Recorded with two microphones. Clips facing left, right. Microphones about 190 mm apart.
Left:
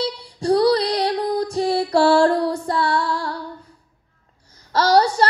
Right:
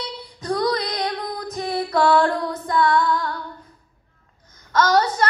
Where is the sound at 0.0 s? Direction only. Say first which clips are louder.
Left 9 dB; 30° left (ahead or behind).